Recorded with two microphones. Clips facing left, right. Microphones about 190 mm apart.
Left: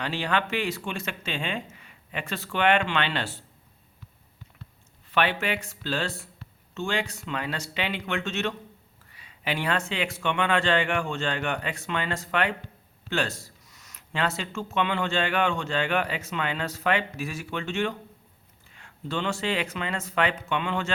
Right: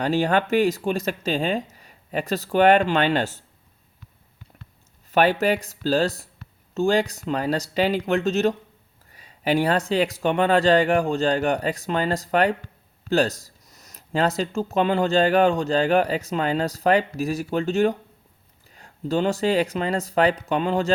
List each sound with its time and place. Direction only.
0.0 s speech: 45° right (ahead or behind)
5.1 s speech: 40° right (ahead or behind)